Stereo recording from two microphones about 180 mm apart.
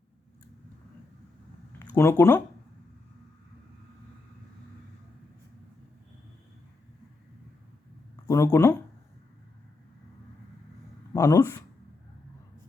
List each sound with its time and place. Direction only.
2.0 s speech: 15° left (ahead or behind)
8.1 s a sound: 20° left (ahead or behind)
11.1 s speech: 20° left (ahead or behind)